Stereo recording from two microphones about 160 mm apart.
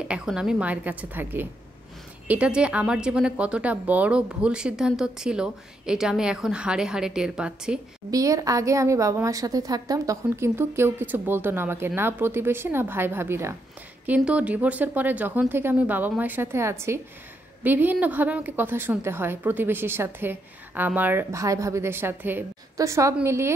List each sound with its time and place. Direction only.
0.1 s a woman's voice: 5° right (ahead or behind)
8.1 s a woman's voice: 20° right (ahead or behind)